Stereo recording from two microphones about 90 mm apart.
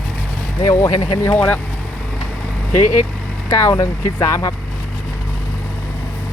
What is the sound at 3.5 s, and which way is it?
Speech, 35° left (ahead or behind).